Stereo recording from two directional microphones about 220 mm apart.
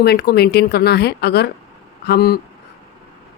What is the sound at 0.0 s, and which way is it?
Speech, 45° left (ahead or behind).